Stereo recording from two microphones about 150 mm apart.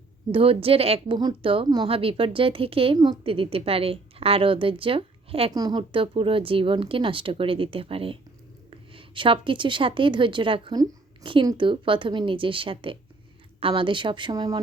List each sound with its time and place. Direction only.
0.3 s a woman's voice: 40° right (ahead or behind)
5.5 s a woman's voice: 25° right (ahead or behind)